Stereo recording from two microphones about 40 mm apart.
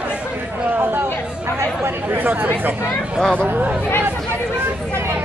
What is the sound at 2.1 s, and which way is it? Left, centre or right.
Speech, right.